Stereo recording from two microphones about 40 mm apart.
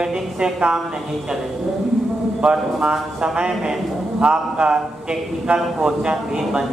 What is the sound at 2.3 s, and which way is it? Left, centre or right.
A man's voice, right.